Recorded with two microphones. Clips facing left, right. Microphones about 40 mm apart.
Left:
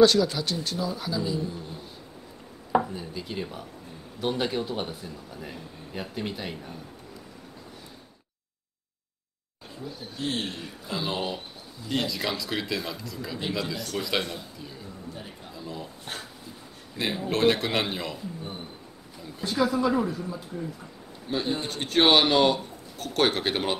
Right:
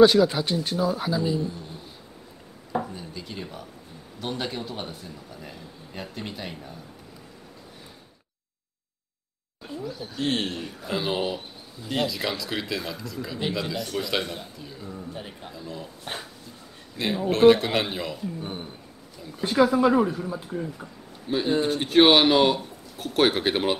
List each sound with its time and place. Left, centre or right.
0.0 s speech: centre
2.8 s a man's voice: centre
10.1 s speech: right
11.1 s a man's voice: centre
15.1 s speech: right
15.5 s a man's voice: centre
16.9 s a man's voice: centre
19.4 s speech: right
20.6 s speech: centre